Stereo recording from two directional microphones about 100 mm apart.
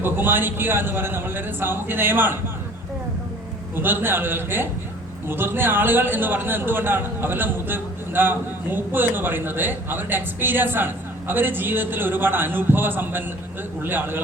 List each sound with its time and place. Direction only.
0.0 s a man's voice: 20° right (ahead or behind)
3.8 s a man's voice: 20° right (ahead or behind)